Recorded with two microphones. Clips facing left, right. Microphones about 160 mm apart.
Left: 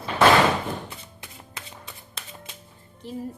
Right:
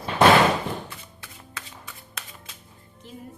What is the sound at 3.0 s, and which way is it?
Speech, 35° left (ahead or behind).